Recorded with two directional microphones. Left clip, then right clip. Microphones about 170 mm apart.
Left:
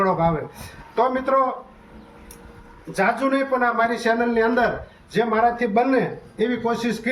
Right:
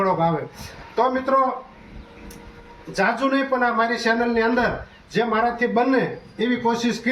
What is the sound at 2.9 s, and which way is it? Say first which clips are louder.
Speech: even; 15° left (ahead or behind).